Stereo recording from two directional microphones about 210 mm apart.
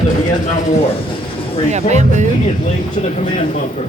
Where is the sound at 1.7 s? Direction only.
35° right (ahead or behind).